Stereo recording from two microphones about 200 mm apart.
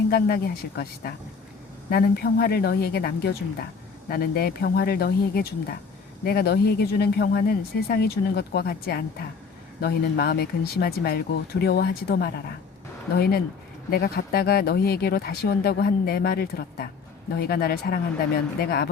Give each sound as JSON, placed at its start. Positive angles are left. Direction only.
{"t": 0.1, "sound": "speech", "side_deg": 50}